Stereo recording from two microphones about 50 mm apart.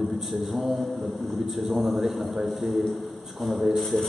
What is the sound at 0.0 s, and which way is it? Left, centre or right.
A man's voice, centre.